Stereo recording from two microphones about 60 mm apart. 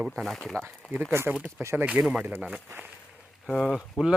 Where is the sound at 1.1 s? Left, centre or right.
Right.